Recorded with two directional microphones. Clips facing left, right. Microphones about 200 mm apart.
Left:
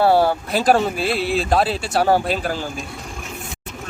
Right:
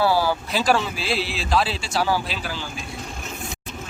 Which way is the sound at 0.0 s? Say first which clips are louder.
Left 5 dB; 60° left (ahead or behind).